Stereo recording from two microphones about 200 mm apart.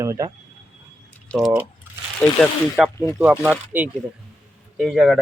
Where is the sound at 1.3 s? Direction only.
5° left (ahead or behind).